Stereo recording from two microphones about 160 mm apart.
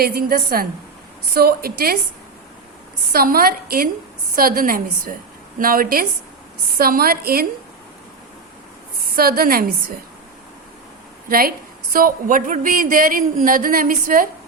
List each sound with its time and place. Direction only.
0.0 s a woman's voice: 70° right (ahead or behind)
3.1 s a woman's voice: 65° right (ahead or behind)
9.0 s a woman's voice: 70° right (ahead or behind)
11.3 s speech: 65° right (ahead or behind)